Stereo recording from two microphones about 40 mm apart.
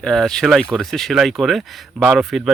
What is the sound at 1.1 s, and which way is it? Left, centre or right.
A man's voice, centre.